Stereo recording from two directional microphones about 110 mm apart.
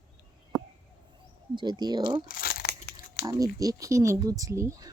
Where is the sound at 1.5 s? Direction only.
40° right (ahead or behind).